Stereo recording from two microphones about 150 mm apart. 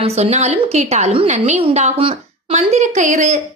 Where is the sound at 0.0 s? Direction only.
45° right (ahead or behind).